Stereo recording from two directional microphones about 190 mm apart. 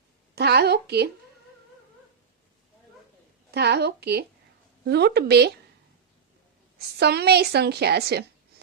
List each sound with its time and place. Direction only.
0.3 s a sound: 60° right (ahead or behind)
3.5 s speech: 60° right (ahead or behind)
6.7 s a woman's voice: 60° right (ahead or behind)